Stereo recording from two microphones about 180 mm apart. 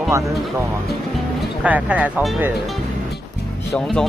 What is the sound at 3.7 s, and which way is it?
Speech, 5° left (ahead or behind).